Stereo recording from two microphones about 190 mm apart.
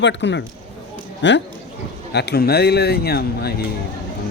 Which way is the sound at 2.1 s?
60° left (ahead or behind).